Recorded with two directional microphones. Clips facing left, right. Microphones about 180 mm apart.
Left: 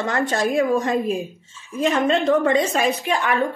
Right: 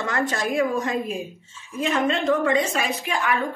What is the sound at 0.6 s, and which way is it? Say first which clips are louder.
A woman's voice: left 3 dB; 40° left (ahead or behind).